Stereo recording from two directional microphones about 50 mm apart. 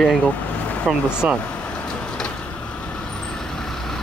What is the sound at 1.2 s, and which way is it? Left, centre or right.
Speech, right.